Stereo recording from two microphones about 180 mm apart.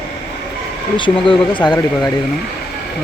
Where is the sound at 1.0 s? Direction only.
25° left (ahead or behind).